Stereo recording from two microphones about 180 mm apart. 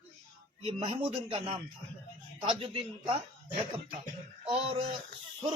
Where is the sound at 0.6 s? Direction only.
30° right (ahead or behind).